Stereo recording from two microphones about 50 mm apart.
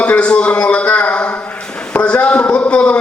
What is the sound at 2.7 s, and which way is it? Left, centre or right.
Speech, left.